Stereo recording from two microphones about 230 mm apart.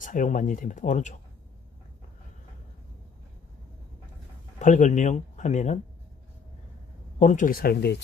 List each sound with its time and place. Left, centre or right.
0.0 s speech: left
4.6 s speech: left
7.2 s speech: left